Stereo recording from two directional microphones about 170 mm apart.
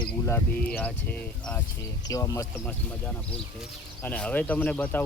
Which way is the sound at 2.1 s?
20° left (ahead or behind).